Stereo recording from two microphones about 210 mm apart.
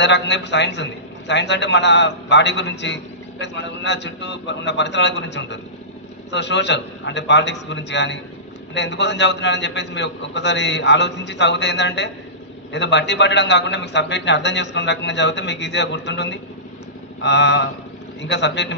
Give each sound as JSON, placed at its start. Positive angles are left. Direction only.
{"t": 0.0, "sound": "a man's voice", "side_deg": 55}